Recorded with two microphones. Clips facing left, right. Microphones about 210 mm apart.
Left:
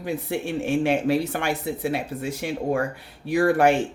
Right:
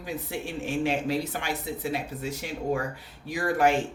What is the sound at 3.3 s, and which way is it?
Speech, 60° left (ahead or behind).